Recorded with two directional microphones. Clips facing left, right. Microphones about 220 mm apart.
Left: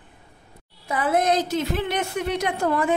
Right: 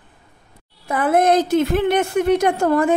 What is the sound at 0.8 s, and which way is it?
A woman's voice, 55° right (ahead or behind).